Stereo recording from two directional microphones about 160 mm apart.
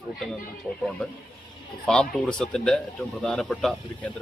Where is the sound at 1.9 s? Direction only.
5° left (ahead or behind).